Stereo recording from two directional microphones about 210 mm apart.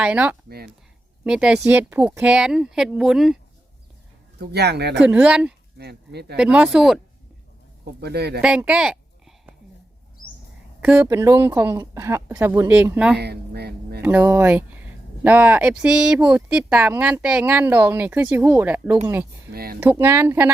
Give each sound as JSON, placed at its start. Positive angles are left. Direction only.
{"t": 0.0, "sound": "speech", "side_deg": -5}
{"t": 0.4, "sound": "speech", "side_deg": -50}
{"t": 1.2, "sound": "speech", "side_deg": -5}
{"t": 4.4, "sound": "speech", "side_deg": -50}
{"t": 5.0, "sound": "speech", "side_deg": -5}
{"t": 5.7, "sound": "speech", "side_deg": -50}
{"t": 6.3, "sound": "speech", "side_deg": -5}
{"t": 8.0, "sound": "speech", "side_deg": -50}
{"t": 8.4, "sound": "a sound", "side_deg": -5}
{"t": 10.8, "sound": "speech", "side_deg": -5}
{"t": 13.1, "sound": "a sound", "side_deg": -50}
{"t": 14.0, "sound": "speech", "side_deg": -10}
{"t": 19.5, "sound": "speech", "side_deg": -45}
{"t": 19.8, "sound": "speech", "side_deg": -10}